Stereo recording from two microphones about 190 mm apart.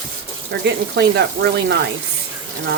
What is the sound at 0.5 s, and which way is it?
Speech, 60° right (ahead or behind).